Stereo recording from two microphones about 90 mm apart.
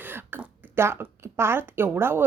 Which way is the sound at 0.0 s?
20° right (ahead or behind).